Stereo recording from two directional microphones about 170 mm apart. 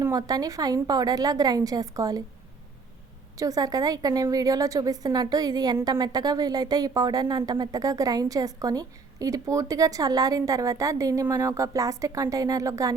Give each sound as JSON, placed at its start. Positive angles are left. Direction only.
{"t": 0.0, "sound": "a woman's voice", "side_deg": -20}
{"t": 3.3, "sound": "a woman's voice", "side_deg": -20}